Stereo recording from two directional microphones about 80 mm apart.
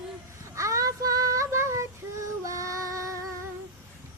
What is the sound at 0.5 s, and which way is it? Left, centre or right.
Child singing, right.